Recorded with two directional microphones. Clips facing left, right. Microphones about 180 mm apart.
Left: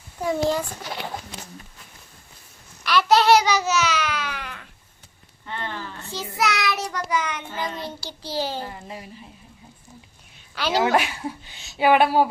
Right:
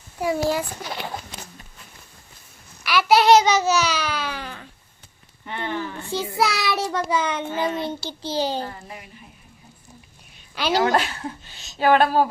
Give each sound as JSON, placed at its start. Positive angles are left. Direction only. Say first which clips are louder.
{"t": 0.2, "sound": "speech", "louder": "even", "side_deg": -10}
{"t": 2.8, "sound": "babbling", "louder": "right 1 dB", "side_deg": -5}
{"t": 5.5, "sound": "speech", "louder": "right 4 dB", "side_deg": -15}
{"t": 6.1, "sound": "a child's voice", "louder": "right 2 dB", "side_deg": -30}
{"t": 8.6, "sound": "speech", "louder": "even", "side_deg": 15}
{"t": 10.8, "sound": "speech", "louder": "even", "side_deg": 15}